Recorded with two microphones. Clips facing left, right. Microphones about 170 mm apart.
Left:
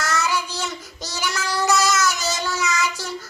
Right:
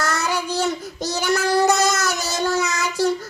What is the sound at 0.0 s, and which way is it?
Child singing, 60° right (ahead or behind).